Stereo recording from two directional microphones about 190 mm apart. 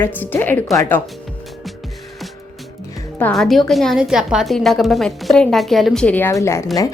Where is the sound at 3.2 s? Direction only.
5° left (ahead or behind).